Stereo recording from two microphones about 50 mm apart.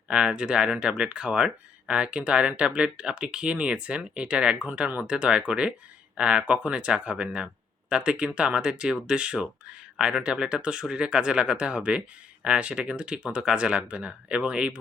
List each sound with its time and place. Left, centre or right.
0.1 s speech: centre